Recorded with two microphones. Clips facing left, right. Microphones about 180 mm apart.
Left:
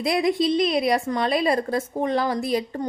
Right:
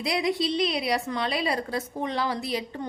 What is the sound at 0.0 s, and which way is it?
A woman's voice, 50° left (ahead or behind).